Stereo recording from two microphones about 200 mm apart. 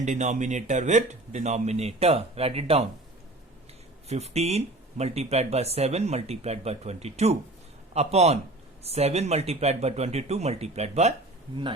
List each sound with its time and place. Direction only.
0.0 s speech: 35° right (ahead or behind)
4.1 s speech: 30° right (ahead or behind)